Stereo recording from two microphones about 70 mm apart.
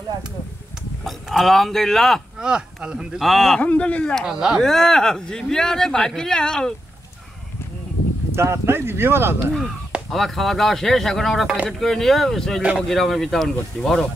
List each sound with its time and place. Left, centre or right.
1.0 s speech: centre
2.3 s speech: centre
3.2 s speech: centre
3.6 s speech: centre
4.2 s speech: centre
4.6 s speech: centre
8.4 s speech: right
10.1 s speech: centre